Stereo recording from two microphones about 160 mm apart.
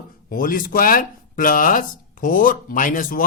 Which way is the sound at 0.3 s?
60° left (ahead or behind).